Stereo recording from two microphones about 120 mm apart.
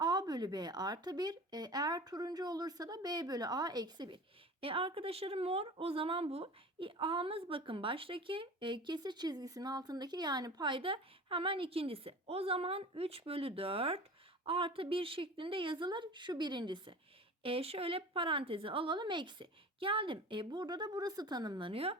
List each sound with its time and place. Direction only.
0.0 s speech: 35° right (ahead or behind)
4.6 s a woman's voice: 50° right (ahead or behind)
17.4 s a woman's voice: 55° right (ahead or behind); by 21.7 s 35° right (ahead or behind)
21.7 s a woman's voice: 55° right (ahead or behind)